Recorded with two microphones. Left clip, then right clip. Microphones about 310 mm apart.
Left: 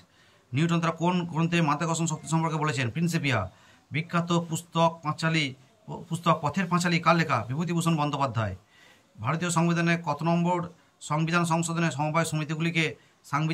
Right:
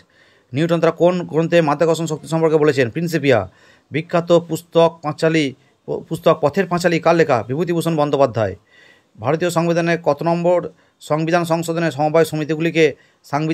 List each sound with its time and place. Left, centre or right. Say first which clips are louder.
0.5 s speech: right 12 dB; centre